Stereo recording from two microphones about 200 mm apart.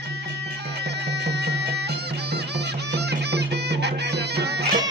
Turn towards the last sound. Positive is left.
turn(degrees=-55)  # may be behind; listen again after turning